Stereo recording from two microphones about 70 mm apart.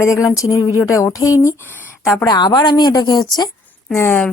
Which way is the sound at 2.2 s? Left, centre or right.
Left.